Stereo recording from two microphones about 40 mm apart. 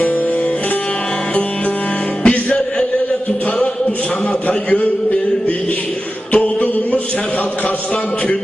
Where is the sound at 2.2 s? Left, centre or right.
Left.